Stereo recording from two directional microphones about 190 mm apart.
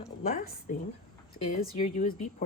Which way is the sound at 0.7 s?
45° left (ahead or behind).